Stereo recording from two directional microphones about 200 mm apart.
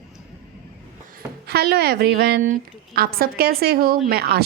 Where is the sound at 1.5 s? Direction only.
50° right (ahead or behind).